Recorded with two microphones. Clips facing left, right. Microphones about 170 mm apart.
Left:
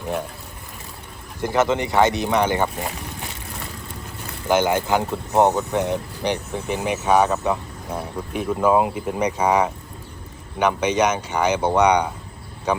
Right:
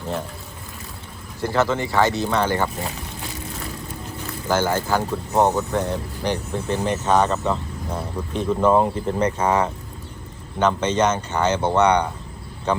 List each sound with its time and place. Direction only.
1.4 s speech: 15° left (ahead or behind)
4.4 s speech: 15° left (ahead or behind)